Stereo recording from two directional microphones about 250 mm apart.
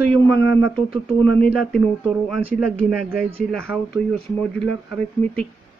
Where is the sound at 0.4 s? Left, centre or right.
Left.